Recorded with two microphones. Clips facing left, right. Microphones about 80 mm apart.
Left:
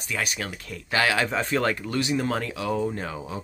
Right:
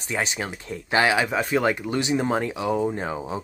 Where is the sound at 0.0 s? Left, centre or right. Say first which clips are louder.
Right 3 dB; right.